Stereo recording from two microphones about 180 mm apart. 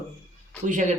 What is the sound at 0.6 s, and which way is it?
Speech, 45° right (ahead or behind).